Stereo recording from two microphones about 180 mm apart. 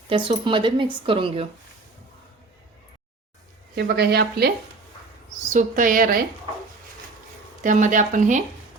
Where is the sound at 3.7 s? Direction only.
65° right (ahead or behind).